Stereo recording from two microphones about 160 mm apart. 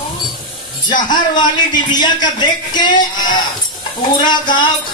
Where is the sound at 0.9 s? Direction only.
25° left (ahead or behind).